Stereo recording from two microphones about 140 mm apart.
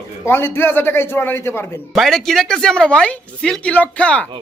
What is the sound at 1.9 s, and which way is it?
A man's voice, centre (ahead or behind).